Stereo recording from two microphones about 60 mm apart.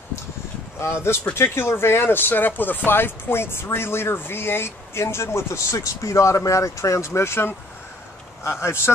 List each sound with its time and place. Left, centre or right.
0.7 s speech: left